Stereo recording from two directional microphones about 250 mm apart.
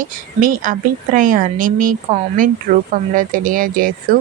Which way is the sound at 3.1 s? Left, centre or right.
Right.